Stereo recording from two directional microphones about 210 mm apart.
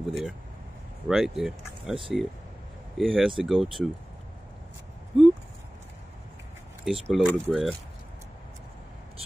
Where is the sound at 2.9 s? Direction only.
Centre (ahead or behind).